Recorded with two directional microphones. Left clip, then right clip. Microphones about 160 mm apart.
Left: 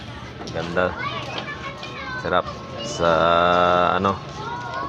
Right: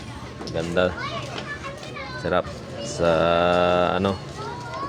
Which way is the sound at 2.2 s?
30° right (ahead or behind).